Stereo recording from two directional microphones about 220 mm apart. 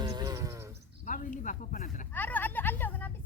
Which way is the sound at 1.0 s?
35° left (ahead or behind).